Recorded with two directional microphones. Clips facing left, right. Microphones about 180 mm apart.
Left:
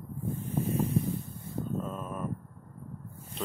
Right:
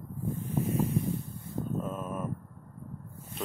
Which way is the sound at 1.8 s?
5° right (ahead or behind).